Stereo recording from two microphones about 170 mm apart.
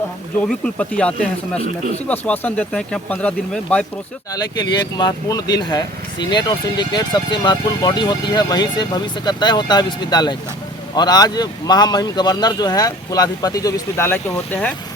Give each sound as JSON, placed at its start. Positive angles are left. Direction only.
{"t": 0.4, "sound": "speech", "side_deg": 5}
{"t": 4.3, "sound": "speech", "side_deg": 25}